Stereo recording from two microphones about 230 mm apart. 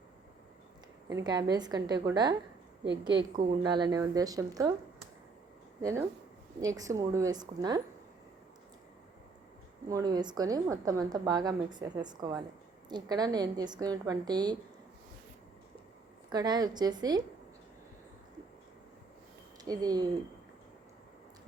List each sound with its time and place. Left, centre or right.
1.1 s a woman's voice: centre
3.6 s a woman's voice: centre
5.8 s a woman's voice: centre
9.9 s a woman's voice: centre
16.3 s a woman's voice: centre
19.6 s a woman's voice: centre